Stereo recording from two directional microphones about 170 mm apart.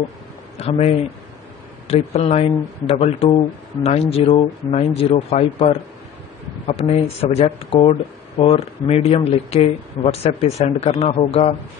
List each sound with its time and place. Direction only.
0.6 s speech: 40° left (ahead or behind)